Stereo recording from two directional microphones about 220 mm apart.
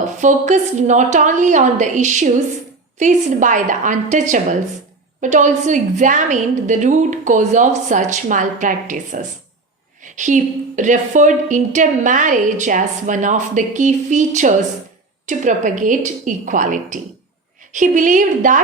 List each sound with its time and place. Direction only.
0.2 s a woman's voice: 35° right (ahead or behind)